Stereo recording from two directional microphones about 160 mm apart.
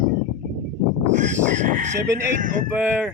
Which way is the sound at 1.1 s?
50° right (ahead or behind).